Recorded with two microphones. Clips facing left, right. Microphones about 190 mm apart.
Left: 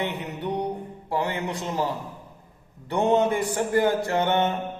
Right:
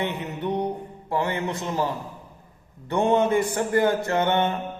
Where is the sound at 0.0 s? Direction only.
15° left (ahead or behind).